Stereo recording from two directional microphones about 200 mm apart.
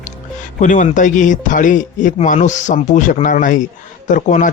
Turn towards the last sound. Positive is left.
turn(degrees=40)  # may be behind; listen again after turning